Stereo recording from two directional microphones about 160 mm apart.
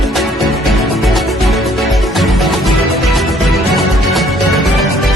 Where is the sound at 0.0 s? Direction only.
Centre (ahead or behind).